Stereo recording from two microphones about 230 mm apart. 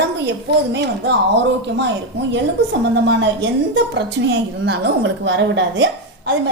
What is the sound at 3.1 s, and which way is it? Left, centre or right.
A woman's voice, right.